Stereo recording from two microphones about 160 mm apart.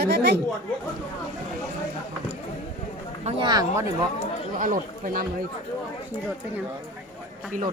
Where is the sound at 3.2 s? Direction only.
40° right (ahead or behind).